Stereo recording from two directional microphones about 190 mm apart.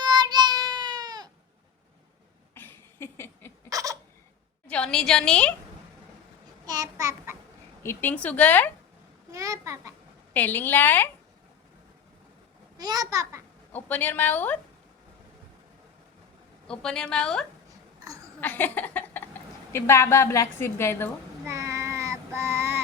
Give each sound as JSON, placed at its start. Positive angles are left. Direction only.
{"t": 0.0, "sound": "a sound", "side_deg": -20}
{"t": 2.6, "sound": "a sound", "side_deg": 10}
{"t": 3.7, "sound": "a sound", "side_deg": -20}
{"t": 4.7, "sound": "a woman's voice", "side_deg": 5}
{"t": 6.7, "sound": "a child's voice", "side_deg": -20}
{"t": 7.8, "sound": "a woman's voice", "side_deg": 10}
{"t": 9.3, "sound": "a child's voice", "side_deg": -15}
{"t": 10.3, "sound": "a woman's voice", "side_deg": 10}
{"t": 12.7, "sound": "a child's voice", "side_deg": -20}
{"t": 13.7, "sound": "a woman's voice", "side_deg": 10}
{"t": 16.6, "sound": "a woman's voice", "side_deg": 5}
{"t": 18.0, "sound": "a sound", "side_deg": -15}
{"t": 18.3, "sound": "a woman's voice", "side_deg": 10}
{"t": 21.4, "sound": "child singing", "side_deg": -15}